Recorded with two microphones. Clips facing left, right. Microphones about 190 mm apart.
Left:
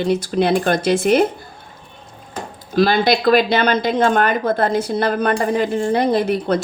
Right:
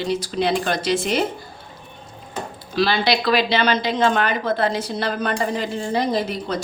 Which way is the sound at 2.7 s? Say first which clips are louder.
Left 4 dB; 50° left (ahead or behind).